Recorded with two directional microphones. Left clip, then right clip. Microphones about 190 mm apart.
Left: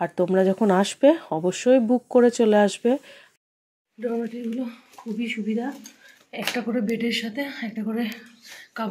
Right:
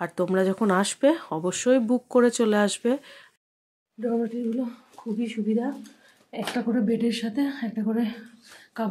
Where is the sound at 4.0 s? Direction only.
15° right (ahead or behind).